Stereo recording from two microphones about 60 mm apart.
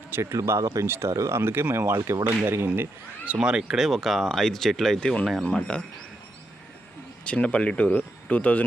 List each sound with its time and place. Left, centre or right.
0.2 s speech: right
1.4 s speech: right
3.2 s speech: centre
4.9 s speech: centre
7.3 s speech: left